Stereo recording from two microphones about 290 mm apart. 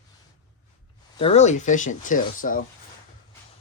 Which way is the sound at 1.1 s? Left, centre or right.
Left.